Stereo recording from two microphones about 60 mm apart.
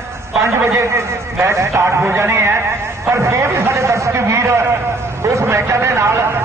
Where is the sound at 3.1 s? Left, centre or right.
Right.